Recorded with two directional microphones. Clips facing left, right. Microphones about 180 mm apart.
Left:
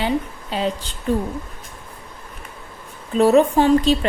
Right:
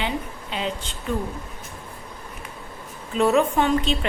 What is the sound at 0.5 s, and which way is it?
Speech, 40° left (ahead or behind).